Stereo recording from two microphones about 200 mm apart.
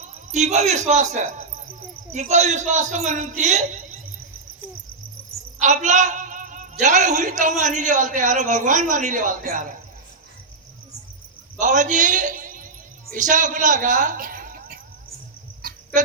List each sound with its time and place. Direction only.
0.0 s a woman's voice: 35° right (ahead or behind)
5.5 s a woman's voice: 35° right (ahead or behind)
11.6 s a man's voice: 40° right (ahead or behind)
15.6 s a sound: 45° right (ahead or behind)